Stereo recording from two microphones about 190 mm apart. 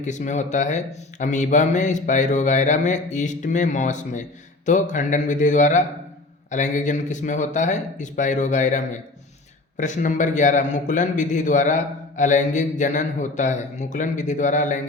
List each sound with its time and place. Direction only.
0.0 s speech: 40° left (ahead or behind)